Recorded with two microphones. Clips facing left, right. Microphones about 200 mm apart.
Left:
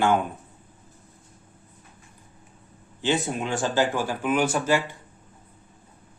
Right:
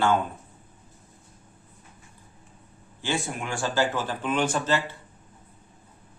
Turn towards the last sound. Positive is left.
turn(degrees=10)  # may be behind; listen again after turning